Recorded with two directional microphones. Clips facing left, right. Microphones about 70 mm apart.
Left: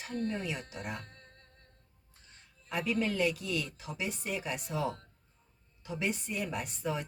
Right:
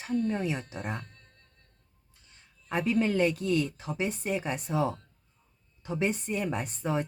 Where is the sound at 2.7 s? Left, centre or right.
Right.